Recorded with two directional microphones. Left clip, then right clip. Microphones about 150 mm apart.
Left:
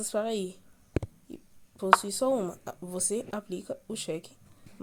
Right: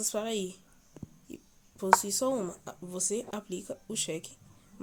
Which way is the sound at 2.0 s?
10° left (ahead or behind).